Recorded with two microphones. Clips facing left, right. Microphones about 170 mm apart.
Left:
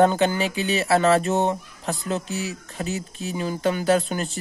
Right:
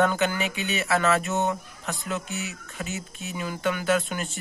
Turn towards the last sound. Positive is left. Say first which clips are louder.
# left 4 dB
turn(degrees=35)  # may be behind; listen again after turning